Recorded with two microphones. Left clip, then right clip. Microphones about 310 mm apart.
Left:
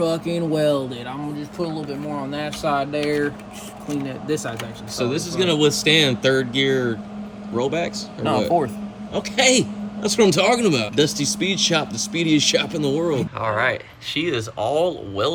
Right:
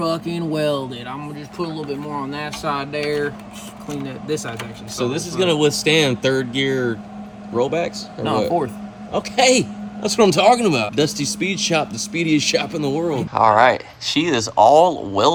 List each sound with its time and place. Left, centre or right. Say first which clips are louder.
0.0 s a man's voice: left 1 dB; centre
13.3 s speech: right 8 dB; centre
14.5 s a man's voice: right 11 dB; right